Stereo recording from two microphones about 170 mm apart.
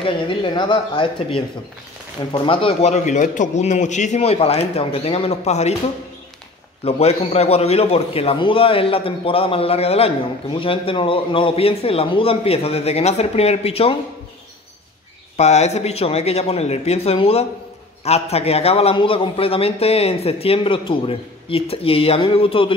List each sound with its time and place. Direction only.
0.0 s a man's voice: 30° left (ahead or behind)
6.8 s a man's voice: 35° left (ahead or behind)
15.3 s a man's voice: 40° left (ahead or behind)